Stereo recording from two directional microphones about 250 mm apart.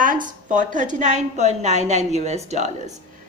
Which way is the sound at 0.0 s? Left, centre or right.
Right.